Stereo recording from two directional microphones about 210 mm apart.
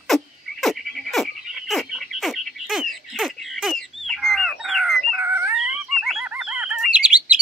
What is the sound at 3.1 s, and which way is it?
Bird, centre (ahead or behind).